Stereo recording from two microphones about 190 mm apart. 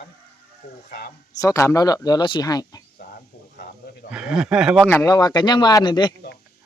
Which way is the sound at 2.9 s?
50° left (ahead or behind).